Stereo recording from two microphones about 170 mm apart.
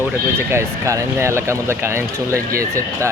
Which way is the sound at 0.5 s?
15° right (ahead or behind).